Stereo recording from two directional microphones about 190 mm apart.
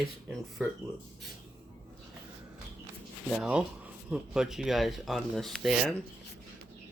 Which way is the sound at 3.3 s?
5° right (ahead or behind).